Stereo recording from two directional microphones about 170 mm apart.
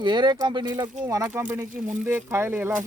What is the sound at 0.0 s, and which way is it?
Speech, 25° right (ahead or behind).